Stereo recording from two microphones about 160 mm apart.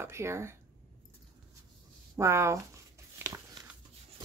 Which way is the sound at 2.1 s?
20° right (ahead or behind).